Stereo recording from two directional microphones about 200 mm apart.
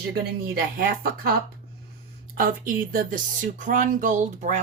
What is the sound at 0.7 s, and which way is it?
Speech, 45° right (ahead or behind).